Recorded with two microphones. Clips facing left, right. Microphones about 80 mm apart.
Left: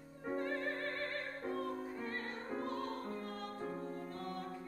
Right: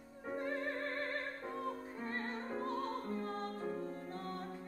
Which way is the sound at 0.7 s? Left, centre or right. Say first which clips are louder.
Right 1 dB; right.